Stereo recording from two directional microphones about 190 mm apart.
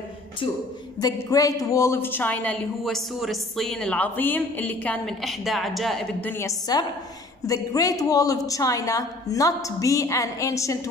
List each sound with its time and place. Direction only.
1.0 s a woman's voice: 20° left (ahead or behind); by 6.3 s centre (ahead or behind)
6.3 s a woman's voice: 20° left (ahead or behind)